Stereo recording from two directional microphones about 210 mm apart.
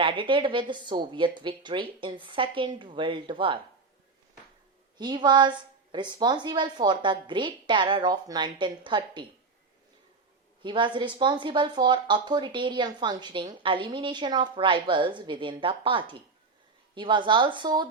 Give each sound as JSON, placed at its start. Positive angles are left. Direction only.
{"t": 0.0, "sound": "a woman's voice", "side_deg": -25}
{"t": 4.9, "sound": "a woman's voice", "side_deg": -20}
{"t": 10.6, "sound": "a woman's voice", "side_deg": -20}